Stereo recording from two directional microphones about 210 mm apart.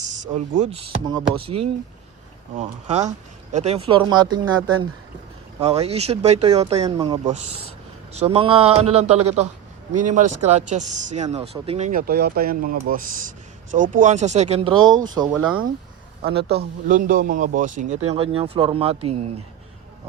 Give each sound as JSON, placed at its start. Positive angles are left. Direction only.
{"t": 0.0, "sound": "speech", "side_deg": -35}
{"t": 6.8, "sound": "speech", "side_deg": -20}
{"t": 7.3, "sound": "speech", "side_deg": -35}
{"t": 16.2, "sound": "speech", "side_deg": -50}